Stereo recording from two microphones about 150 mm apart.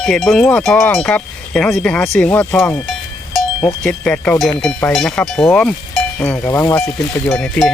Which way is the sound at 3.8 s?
10° left (ahead or behind).